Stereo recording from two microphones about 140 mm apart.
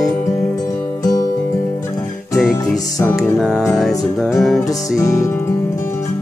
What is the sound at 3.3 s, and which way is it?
Music, centre (ahead or behind).